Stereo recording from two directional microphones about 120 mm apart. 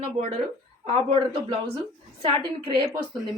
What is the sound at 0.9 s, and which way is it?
Speech, 60° right (ahead or behind).